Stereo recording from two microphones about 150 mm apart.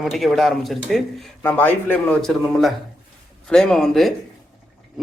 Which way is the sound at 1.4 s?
10° left (ahead or behind).